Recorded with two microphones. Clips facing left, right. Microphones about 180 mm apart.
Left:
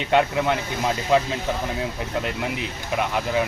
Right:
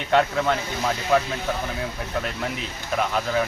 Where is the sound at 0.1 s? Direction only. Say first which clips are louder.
Even; 15° left (ahead or behind).